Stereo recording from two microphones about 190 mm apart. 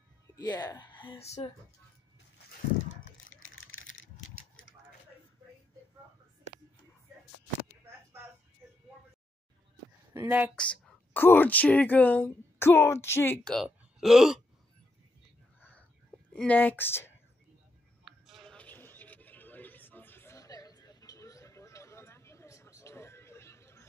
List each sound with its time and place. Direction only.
0.4 s a woman's voice: 20° left (ahead or behind)
3.3 s a sound: 90° left
10.1 s speech: 10° right (ahead or behind)
10.5 s speech: 5° left (ahead or behind)
16.3 s speech: 10° left (ahead or behind)
18.0 s a sound: centre (ahead or behind)